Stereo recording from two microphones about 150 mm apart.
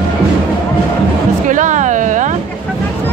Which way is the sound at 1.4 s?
55° right (ahead or behind).